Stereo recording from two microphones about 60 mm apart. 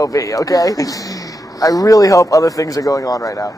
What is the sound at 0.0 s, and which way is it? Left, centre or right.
Speech, left.